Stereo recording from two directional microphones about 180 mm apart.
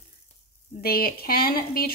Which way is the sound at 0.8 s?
60° left (ahead or behind).